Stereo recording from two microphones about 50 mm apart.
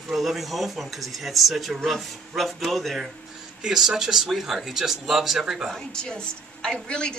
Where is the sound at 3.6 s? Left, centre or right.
Centre.